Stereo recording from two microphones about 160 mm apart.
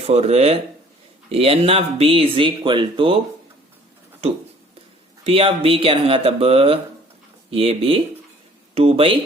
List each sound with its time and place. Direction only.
0.1 s speech: 40° right (ahead or behind)
5.2 s speech: 35° right (ahead or behind)